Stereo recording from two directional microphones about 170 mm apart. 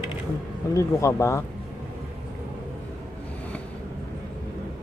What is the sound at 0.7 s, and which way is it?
Speech, 15° left (ahead or behind).